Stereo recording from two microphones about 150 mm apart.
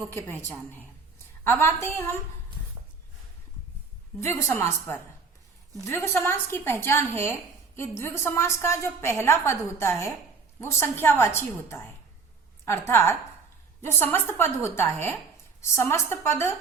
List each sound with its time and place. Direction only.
0.1 s a woman's voice: 15° left (ahead or behind)
4.2 s a woman's voice: 20° left (ahead or behind)